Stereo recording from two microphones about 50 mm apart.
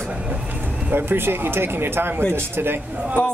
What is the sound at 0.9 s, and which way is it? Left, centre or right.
A woman's voice, right.